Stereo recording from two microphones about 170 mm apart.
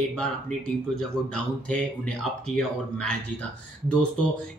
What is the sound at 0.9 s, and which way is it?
Speech, 5° left (ahead or behind).